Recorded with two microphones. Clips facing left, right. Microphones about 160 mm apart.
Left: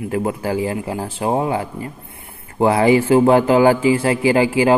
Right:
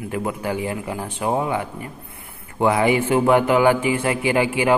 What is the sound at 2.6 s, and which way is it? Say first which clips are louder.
A man's voice: left 4 dB; 30° left (ahead or behind).